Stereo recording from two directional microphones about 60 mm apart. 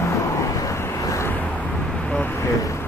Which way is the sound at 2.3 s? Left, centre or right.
Left.